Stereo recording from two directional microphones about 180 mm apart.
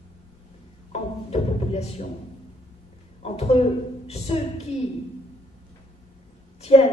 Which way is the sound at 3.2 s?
35° left (ahead or behind).